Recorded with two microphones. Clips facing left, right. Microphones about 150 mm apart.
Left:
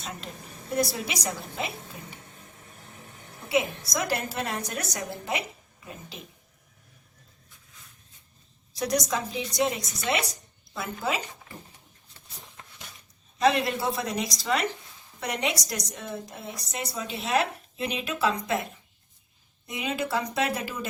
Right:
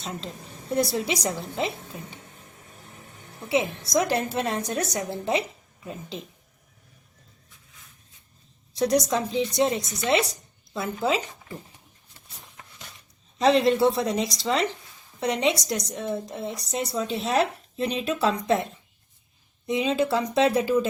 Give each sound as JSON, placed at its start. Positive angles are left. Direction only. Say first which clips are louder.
{"t": 0.8, "sound": "a woman's voice", "louder": "right 3 dB", "side_deg": -25}
{"t": 3.5, "sound": "a woman's voice", "louder": "right 3 dB", "side_deg": -25}
{"t": 8.9, "sound": "a woman's voice", "louder": "right 3 dB", "side_deg": -30}
{"t": 13.4, "sound": "a woman's voice", "louder": "right 5 dB", "side_deg": -30}
{"t": 19.6, "sound": "a woman's voice", "louder": "right 7 dB", "side_deg": -25}